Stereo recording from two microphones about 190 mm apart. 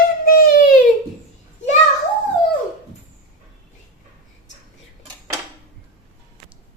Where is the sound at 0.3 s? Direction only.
50° left (ahead or behind).